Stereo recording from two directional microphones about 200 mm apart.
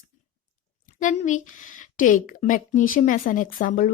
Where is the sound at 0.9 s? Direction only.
40° left (ahead or behind).